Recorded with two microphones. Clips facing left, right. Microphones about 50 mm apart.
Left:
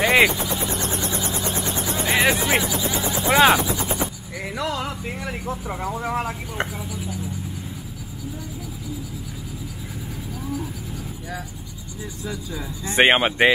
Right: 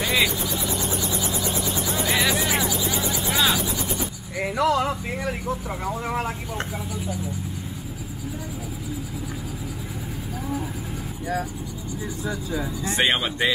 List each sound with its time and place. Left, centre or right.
0.0 s vehicle: left
0.7 s vehicle: left
2.7 s a sound: centre
3.3 s speech: left
4.4 s speech: centre
12.3 s speech: centre
12.9 s speech: left